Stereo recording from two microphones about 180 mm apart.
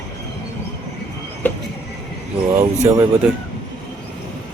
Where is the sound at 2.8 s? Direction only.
20° right (ahead or behind).